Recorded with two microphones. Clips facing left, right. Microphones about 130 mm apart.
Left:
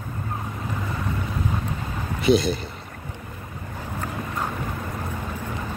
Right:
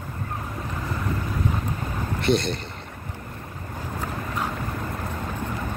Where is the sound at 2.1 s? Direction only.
Centre (ahead or behind).